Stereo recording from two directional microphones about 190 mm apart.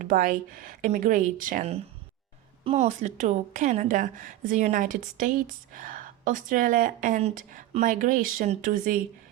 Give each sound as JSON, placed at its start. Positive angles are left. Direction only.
{"t": 0.0, "sound": "a woman's voice", "side_deg": -45}